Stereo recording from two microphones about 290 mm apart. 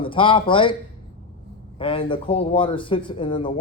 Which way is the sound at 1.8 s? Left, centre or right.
Centre.